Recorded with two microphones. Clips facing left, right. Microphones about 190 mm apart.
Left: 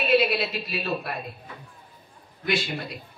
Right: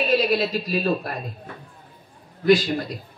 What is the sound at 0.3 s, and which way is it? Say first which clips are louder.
Speech: right 6 dB; 40° right (ahead or behind).